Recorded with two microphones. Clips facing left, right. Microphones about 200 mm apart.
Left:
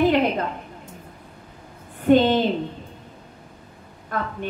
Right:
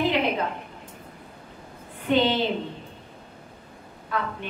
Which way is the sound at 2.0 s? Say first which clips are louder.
Left 6 dB; 45° left (ahead or behind).